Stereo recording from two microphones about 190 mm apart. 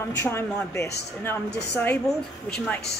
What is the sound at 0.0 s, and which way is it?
Speech, 15° left (ahead or behind).